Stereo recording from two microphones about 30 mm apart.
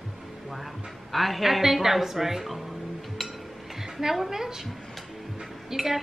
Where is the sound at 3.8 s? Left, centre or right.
Centre.